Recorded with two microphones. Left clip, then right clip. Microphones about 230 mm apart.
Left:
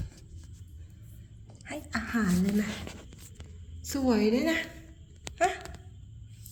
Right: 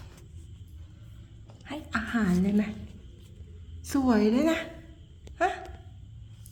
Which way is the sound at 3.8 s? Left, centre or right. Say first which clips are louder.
Right 2 dB; centre.